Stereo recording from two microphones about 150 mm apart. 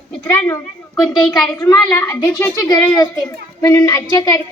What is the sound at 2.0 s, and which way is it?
A woman's voice, 20° left (ahead or behind).